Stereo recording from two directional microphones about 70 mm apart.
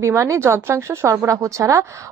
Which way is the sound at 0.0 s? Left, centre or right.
Right.